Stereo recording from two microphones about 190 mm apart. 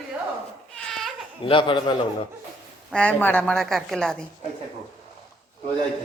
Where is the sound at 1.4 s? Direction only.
25° left (ahead or behind).